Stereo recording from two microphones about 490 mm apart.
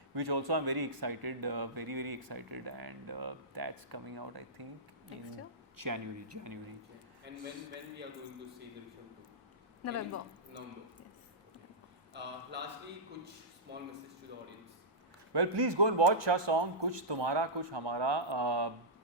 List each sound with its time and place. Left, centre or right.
0.1 s speech: right
5.8 s speech: right
7.3 s a man's voice: right
9.8 s a woman's voice: left
12.1 s a man's voice: right
13.7 s a man's voice: right
15.3 s speech: right